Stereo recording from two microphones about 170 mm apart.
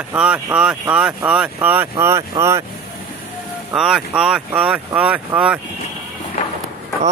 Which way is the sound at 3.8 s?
5° right (ahead or behind).